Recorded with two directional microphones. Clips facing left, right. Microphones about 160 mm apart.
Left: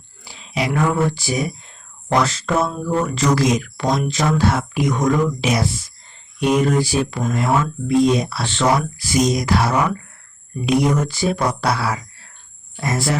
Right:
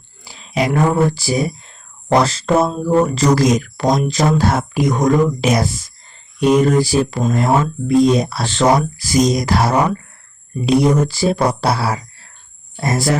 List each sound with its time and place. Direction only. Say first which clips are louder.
0.3 s speech: right 4 dB; 45° right (ahead or behind)